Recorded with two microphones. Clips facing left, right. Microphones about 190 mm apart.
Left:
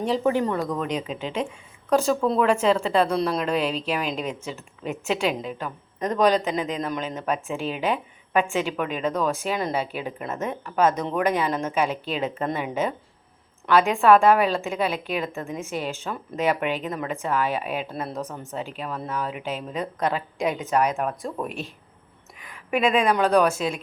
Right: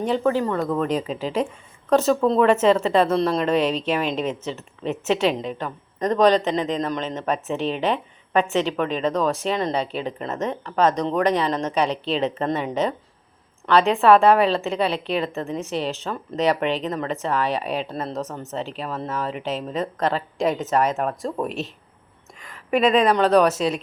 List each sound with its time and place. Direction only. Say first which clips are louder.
0.2 s a woman's voice: right 1 dB; 15° left (ahead or behind)
0.7 s a woman's voice: right 4 dB; centre (ahead or behind)
22.7 s a woman's voice: right 3 dB; 10° left (ahead or behind)